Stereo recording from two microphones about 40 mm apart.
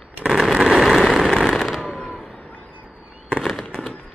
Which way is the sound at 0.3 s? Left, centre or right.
Centre.